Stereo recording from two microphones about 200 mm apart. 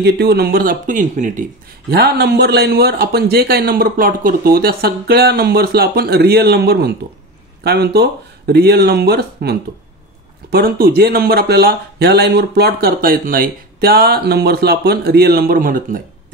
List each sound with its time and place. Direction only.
0.0 s speech: 55° right (ahead or behind); by 1.4 s 40° right (ahead or behind)
1.9 s speech: 55° right (ahead or behind)